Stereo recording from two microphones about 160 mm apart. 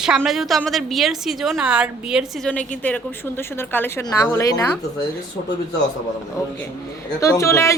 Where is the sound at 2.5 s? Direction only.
10° left (ahead or behind).